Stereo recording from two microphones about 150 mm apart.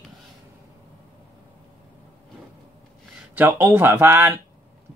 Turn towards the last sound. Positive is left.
turn(degrees=-15)  # may be behind; listen again after turning